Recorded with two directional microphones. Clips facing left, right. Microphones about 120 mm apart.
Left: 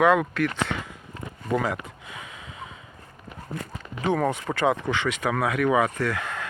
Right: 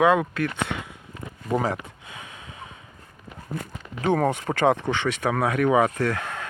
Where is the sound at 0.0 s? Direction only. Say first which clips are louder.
Even; 20° right (ahead or behind).